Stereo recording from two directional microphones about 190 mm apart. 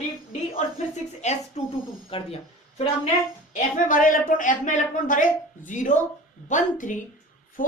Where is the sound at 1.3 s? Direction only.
35° left (ahead or behind).